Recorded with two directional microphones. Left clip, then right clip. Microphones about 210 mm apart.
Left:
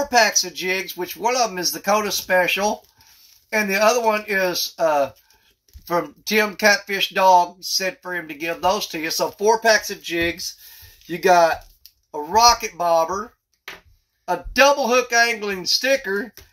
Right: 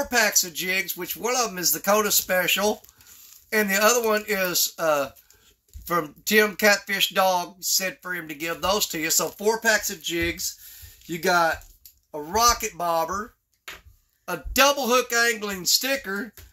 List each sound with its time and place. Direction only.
0.4 s speech: 25° right (ahead or behind)
14.2 s speech: 25° right (ahead or behind)